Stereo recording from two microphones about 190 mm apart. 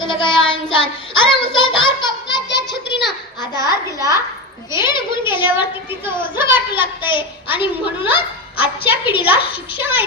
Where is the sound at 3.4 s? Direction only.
20° left (ahead or behind).